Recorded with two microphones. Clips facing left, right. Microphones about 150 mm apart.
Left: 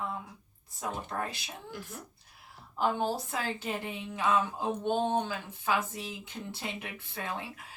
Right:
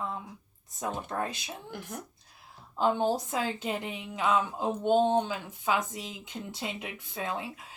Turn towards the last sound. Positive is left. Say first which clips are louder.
# right 3 dB
turn(degrees=-20)  # may be behind; listen again after turning